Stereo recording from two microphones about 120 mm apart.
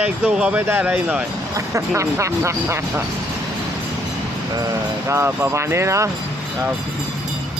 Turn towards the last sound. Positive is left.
turn(degrees=-25)  # may be behind; listen again after turning